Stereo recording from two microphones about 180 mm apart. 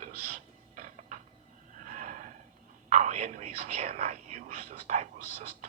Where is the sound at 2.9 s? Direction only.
40° right (ahead or behind).